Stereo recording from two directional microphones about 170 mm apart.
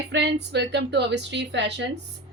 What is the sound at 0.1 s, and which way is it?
A woman's voice, 80° right.